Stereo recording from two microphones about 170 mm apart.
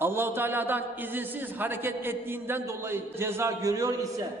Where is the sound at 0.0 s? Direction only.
15° right (ahead or behind).